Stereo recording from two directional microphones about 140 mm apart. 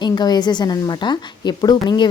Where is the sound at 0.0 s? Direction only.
30° left (ahead or behind).